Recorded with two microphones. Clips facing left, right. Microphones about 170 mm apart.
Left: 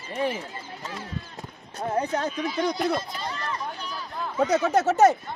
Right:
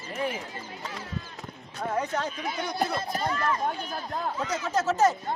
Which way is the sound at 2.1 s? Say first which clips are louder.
Left 3 dB; 50° left (ahead or behind).